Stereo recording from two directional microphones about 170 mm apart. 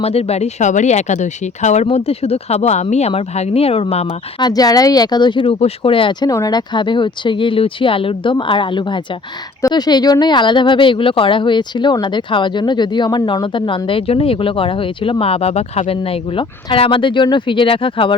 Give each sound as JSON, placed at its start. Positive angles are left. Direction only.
{"t": 0.0, "sound": "speech", "side_deg": 35}
{"t": 4.4, "sound": "speech", "side_deg": 20}